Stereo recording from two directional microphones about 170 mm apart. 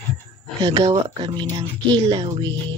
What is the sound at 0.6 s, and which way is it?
Speech, 35° right (ahead or behind).